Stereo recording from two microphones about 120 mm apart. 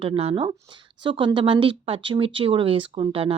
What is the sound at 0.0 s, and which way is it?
Speech, 50° right (ahead or behind).